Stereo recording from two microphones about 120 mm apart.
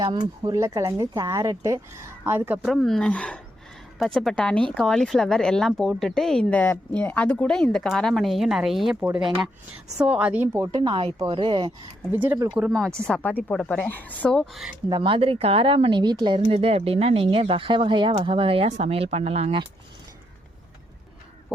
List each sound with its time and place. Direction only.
0.0 s a woman's voice: 35° right (ahead or behind); by 2.6 s 15° right (ahead or behind)
2.6 s a woman's voice: centre (ahead or behind); by 10.8 s 20° right (ahead or behind)
10.8 s speech: 45° right (ahead or behind)
12.1 s a woman's voice: 15° right (ahead or behind)
12.7 s speech: 5° left (ahead or behind)
14.8 s speech: 40° right (ahead or behind)